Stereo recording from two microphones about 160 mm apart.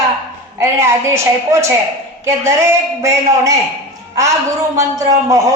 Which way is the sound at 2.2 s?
15° right (ahead or behind).